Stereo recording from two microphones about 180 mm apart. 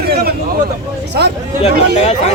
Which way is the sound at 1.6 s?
35° left (ahead or behind).